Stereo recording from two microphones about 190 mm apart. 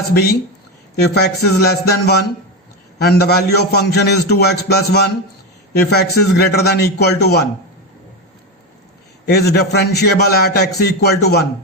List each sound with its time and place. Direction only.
0.1 s a man's voice: 55° left (ahead or behind)
9.2 s a man's voice: 60° left (ahead or behind)